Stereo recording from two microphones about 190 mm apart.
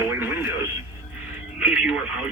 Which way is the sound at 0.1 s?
10° right (ahead or behind).